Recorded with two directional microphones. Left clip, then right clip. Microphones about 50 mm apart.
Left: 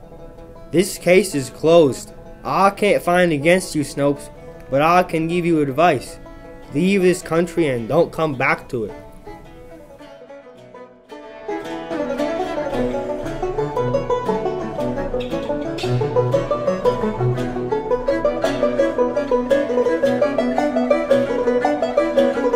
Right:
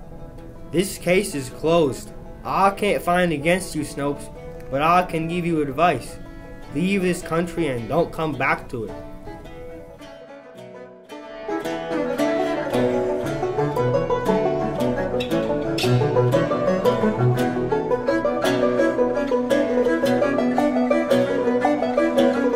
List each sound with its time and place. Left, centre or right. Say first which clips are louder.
0.7 s speech: left 5 dB; centre
11.6 s music: right 1 dB; centre
12.7 s music: right 1 dB; centre; by 18.5 s left
18.5 s music: left 1 dB; centre
21.3 s music: left 2 dB; left
22.0 s music: even; centre